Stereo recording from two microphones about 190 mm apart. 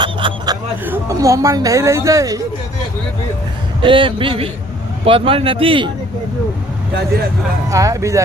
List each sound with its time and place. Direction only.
0.0 s a sound: 25° right (ahead or behind)
0.9 s a woman's voice: 15° right (ahead or behind)
3.8 s a man's voice: 25° right (ahead or behind)
7.7 s a woman's voice: 15° right (ahead or behind)